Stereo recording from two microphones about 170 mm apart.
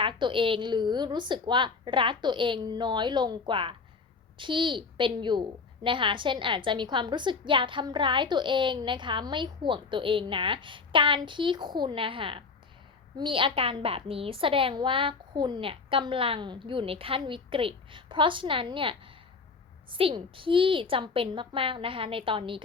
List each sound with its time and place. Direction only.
0.0 s a woman's voice: 30° right (ahead or behind)